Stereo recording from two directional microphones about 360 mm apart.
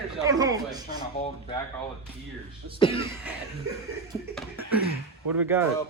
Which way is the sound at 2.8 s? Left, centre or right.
Centre.